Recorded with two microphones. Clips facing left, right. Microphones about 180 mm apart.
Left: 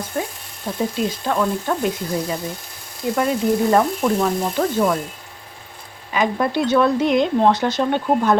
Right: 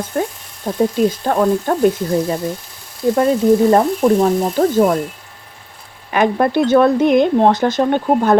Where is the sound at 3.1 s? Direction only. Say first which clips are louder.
Right 6 dB; 35° right (ahead or behind).